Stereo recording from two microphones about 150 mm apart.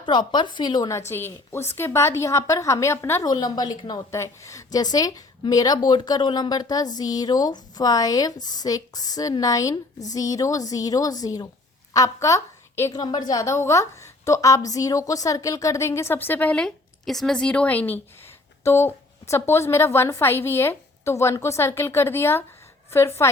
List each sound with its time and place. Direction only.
0.0 s a woman's voice: 30° left (ahead or behind)